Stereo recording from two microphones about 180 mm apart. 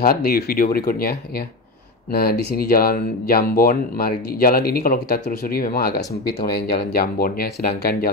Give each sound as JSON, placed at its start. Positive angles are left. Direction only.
{"t": 0.0, "sound": "speech", "side_deg": 55}
{"t": 2.1, "sound": "speech", "side_deg": 60}